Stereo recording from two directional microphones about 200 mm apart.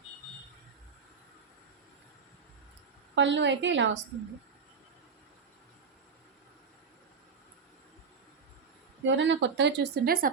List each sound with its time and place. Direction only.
3.2 s speech: 65° right (ahead or behind)
9.0 s speech: 65° right (ahead or behind); by 10.3 s 45° right (ahead or behind)